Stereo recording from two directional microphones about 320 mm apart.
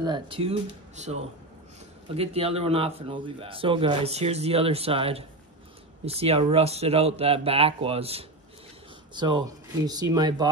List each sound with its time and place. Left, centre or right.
0.0 s speech: centre